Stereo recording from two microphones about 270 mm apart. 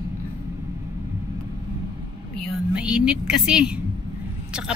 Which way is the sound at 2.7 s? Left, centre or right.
Centre.